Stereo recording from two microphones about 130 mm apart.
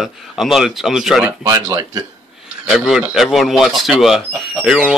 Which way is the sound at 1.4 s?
30° right (ahead or behind).